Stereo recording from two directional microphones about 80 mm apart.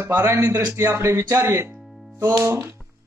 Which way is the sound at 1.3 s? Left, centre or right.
Right.